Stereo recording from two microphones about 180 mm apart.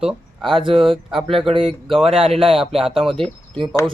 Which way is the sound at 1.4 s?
30° right (ahead or behind).